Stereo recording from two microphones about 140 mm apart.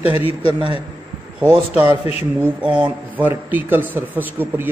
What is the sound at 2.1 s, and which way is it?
Speech, 45° left (ahead or behind).